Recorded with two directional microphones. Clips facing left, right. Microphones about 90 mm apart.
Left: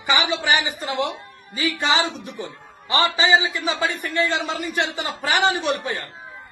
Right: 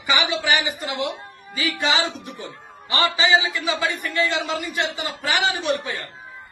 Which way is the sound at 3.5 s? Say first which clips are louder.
Even; 30° left (ahead or behind).